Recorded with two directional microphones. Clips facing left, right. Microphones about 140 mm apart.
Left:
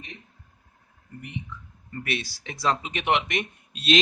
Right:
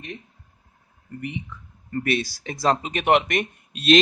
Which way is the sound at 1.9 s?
40° right (ahead or behind).